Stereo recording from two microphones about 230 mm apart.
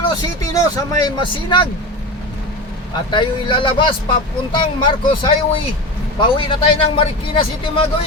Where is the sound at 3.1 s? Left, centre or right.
Left.